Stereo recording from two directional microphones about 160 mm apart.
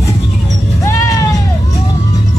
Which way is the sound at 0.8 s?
20° left (ahead or behind).